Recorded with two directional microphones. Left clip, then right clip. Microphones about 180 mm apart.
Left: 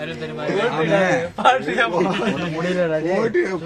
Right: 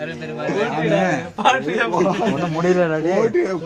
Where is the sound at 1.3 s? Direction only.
20° left (ahead or behind).